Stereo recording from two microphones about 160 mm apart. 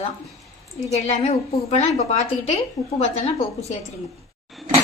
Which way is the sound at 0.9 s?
45° left (ahead or behind).